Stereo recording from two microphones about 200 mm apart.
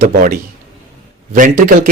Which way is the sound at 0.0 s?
45° right (ahead or behind).